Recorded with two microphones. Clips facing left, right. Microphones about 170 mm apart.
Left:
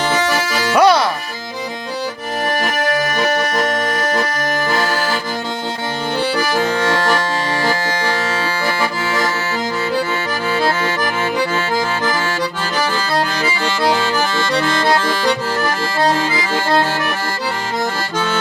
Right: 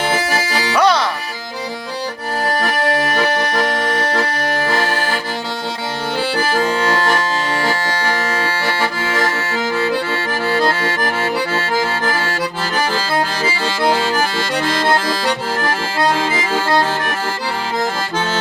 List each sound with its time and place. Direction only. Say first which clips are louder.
0.8 s music: left 3 dB; 10° left (ahead or behind)
8.8 s accordion: right 1 dB; 30° right (ahead or behind)